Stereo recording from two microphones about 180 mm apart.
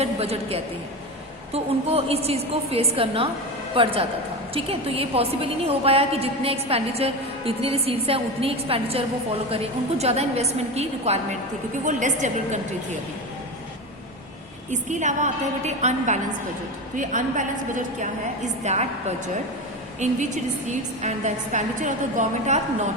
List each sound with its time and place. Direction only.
0.0 s a woman's voice: 35° right (ahead or behind)
14.7 s a woman's voice: 40° right (ahead or behind)